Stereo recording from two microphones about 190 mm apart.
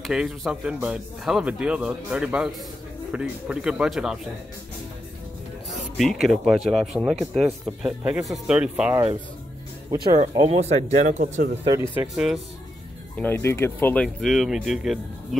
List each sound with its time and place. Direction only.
0.0 s speech: centre (ahead or behind)
5.7 s speech: centre (ahead or behind)
9.8 s speech: 20° right (ahead or behind)
10.4 s speech: 35° right (ahead or behind)
11.9 s speech: 5° right (ahead or behind)
13.2 s speech: 10° left (ahead or behind)